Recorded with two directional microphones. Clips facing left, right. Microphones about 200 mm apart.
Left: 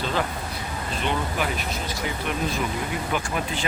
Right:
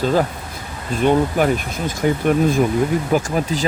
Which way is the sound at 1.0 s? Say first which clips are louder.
Right 12 dB; 45° right (ahead or behind).